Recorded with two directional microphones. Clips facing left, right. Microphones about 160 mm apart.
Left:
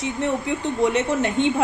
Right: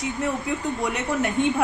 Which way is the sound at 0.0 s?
25° left (ahead or behind).